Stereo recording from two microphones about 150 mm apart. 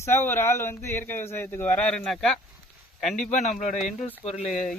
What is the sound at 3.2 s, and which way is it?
Speech, 50° left (ahead or behind).